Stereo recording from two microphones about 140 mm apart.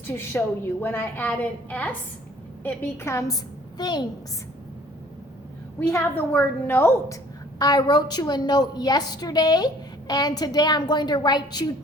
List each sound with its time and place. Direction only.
0.1 s a woman's voice: 15° left (ahead or behind)
3.8 s a woman's voice: 30° left (ahead or behind)
5.8 s a woman's voice: 15° left (ahead or behind)
7.6 s a woman's voice: 30° left (ahead or behind)